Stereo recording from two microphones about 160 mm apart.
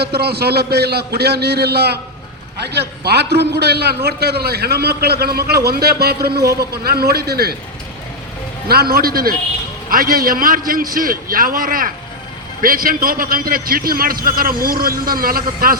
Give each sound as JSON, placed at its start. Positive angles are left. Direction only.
{"t": 0.0, "sound": "a man's voice", "side_deg": -85}
{"t": 8.6, "sound": "a man's voice", "side_deg": -70}